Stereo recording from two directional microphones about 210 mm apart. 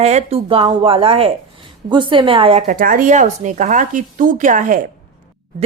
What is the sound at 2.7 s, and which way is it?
Speech, 40° right (ahead or behind).